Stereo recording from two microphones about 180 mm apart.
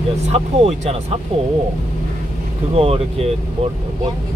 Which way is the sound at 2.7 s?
35° right (ahead or behind).